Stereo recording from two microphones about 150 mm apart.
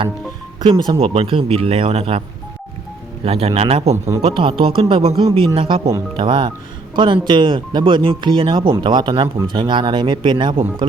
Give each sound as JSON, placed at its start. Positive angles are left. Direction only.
{"t": 0.6, "sound": "speech", "side_deg": -35}
{"t": 3.2, "sound": "speech", "side_deg": -40}
{"t": 3.9, "sound": "speech", "side_deg": -20}
{"t": 4.2, "sound": "speech", "side_deg": -40}